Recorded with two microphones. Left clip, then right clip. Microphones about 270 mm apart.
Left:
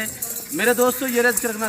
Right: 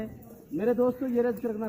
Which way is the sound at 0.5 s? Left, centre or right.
Left.